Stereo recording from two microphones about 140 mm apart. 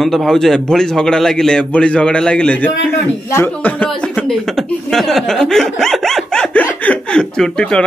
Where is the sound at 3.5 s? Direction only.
10° left (ahead or behind).